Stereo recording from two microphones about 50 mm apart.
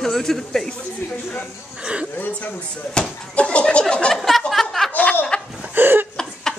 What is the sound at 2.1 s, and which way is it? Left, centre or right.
Speech, left.